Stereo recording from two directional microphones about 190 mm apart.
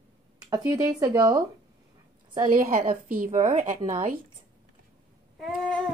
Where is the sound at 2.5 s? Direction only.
45° right (ahead or behind).